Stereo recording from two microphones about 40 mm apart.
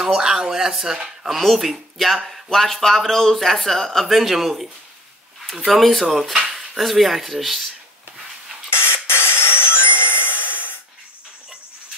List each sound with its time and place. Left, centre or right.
0.0 s speech: centre
5.7 s speech: centre
8.6 s spray: left
9.0 s a sound: left